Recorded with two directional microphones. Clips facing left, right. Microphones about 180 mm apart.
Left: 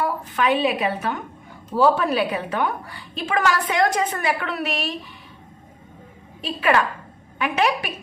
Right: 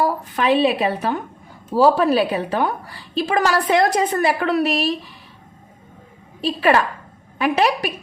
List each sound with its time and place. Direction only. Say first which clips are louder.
0.0 s a woman's voice: right 3 dB; 35° right (ahead or behind)
6.4 s a woman's voice: right 3 dB; 35° right (ahead or behind)